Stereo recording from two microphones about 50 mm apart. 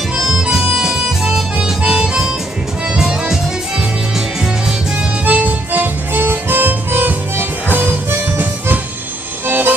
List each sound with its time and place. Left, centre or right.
0.2 s harmonica: centre
3.0 s music: centre
5.2 s music: right
5.7 s music: right
7.7 s harmonica: right
9.5 s music: right